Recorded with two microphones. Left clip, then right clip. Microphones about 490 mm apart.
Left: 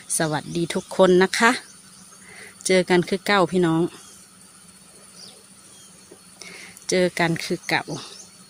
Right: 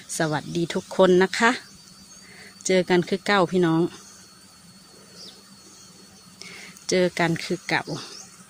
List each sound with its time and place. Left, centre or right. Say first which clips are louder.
0.2 s speech: left 1 dB; right
2.6 s speech: left 2 dB; right
6.4 s speech: left 1 dB; right